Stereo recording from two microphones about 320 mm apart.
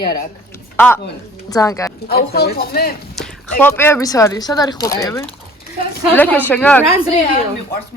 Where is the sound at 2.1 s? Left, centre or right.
Left.